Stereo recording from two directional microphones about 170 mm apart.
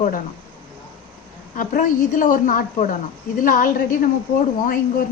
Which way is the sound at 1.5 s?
55° left (ahead or behind).